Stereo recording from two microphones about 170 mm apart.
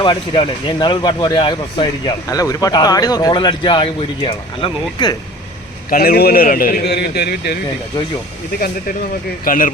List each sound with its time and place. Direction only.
0.0 s speech: 30° left (ahead or behind)
5.9 s a man's voice: 60° left (ahead or behind)
8.5 s a man's voice: 60° left (ahead or behind)